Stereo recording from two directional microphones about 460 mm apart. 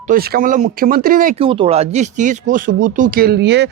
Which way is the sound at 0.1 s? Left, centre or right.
Centre.